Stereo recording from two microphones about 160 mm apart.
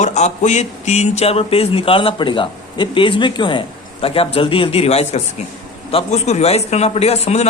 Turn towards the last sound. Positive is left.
turn(degrees=40)  # may be behind; listen again after turning